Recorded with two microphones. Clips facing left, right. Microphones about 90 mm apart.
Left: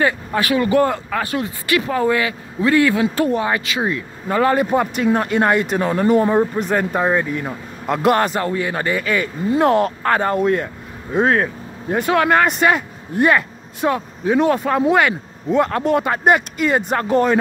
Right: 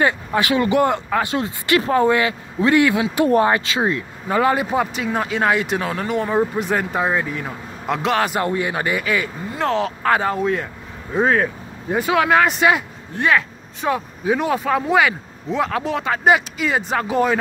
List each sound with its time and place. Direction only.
0.0 s speech: 20° right (ahead or behind)
3.4 s speech: 30° right (ahead or behind)
4.3 s speech: 10° right (ahead or behind)
8.4 s a man's voice: 20° right (ahead or behind)
9.6 s speech: 10° left (ahead or behind)
10.0 s speech: 5° right (ahead or behind)